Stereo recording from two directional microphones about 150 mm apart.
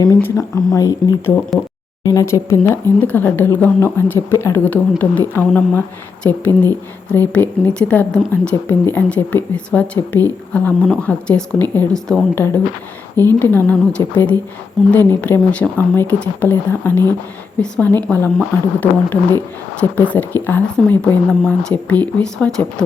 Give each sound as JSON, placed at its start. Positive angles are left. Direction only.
{"t": 0.0, "sound": "speech", "side_deg": 15}